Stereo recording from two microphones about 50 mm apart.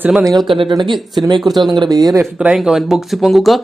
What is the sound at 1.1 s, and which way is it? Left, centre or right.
Speech, centre.